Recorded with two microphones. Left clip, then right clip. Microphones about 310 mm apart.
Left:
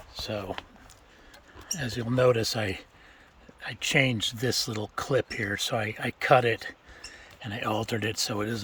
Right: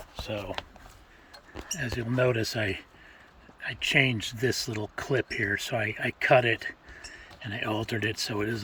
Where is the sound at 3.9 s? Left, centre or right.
Left.